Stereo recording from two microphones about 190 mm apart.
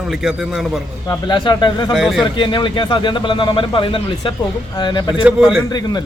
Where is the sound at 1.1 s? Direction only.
25° left (ahead or behind).